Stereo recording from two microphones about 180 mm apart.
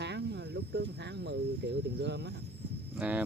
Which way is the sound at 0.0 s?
70° right (ahead or behind).